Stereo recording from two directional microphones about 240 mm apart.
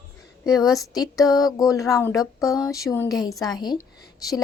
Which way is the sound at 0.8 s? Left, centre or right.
Centre.